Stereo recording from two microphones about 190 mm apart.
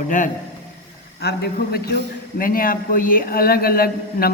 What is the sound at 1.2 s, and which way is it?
A man's voice, 60° left (ahead or behind).